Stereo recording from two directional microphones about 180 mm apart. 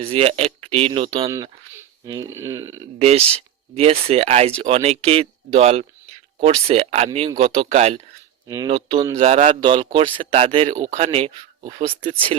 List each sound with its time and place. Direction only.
0.0 s speech: 35° right (ahead or behind)
1.3 s speech: 15° right (ahead or behind)
3.0 s speech: 35° right (ahead or behind)
8.4 s speech: 20° right (ahead or behind)
8.7 s speech: 30° right (ahead or behind)
9.6 s speech: 30° right (ahead or behind)